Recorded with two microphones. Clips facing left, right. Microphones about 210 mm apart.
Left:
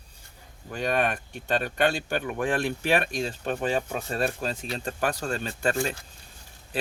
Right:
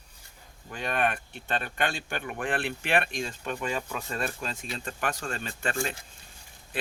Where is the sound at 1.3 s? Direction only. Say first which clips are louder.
Left 5 dB; 40° left (ahead or behind).